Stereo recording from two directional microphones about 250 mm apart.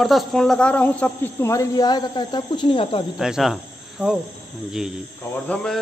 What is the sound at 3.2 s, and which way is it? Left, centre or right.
Speech, centre.